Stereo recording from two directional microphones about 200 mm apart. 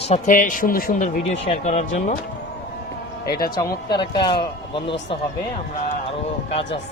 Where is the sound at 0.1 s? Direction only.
40° left (ahead or behind).